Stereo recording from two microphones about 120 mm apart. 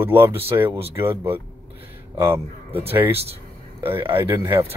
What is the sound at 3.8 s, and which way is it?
Speech, 20° right (ahead or behind).